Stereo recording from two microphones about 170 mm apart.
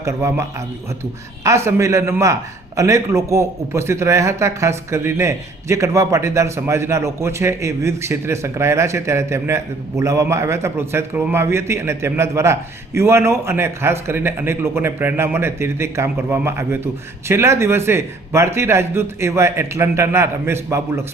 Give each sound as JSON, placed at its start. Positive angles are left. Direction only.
{"t": 0.0, "sound": "a man's voice", "side_deg": -15}
{"t": 1.5, "sound": "a man's voice", "side_deg": -15}